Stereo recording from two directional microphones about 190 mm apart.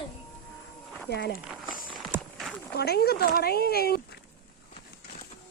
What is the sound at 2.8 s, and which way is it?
Speech, 55° left (ahead or behind).